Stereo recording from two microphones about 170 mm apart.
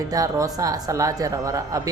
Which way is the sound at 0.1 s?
20° right (ahead or behind).